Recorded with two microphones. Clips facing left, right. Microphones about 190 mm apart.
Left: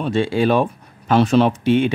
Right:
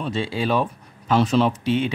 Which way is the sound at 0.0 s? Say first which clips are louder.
Left 7 dB; 55° left (ahead or behind).